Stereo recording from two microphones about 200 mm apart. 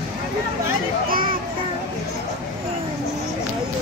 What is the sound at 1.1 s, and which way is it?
Children playing, 45° right (ahead or behind).